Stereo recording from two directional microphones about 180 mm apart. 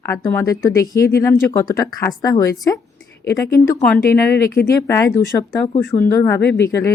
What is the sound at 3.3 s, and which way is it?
Speech, 65° left (ahead or behind).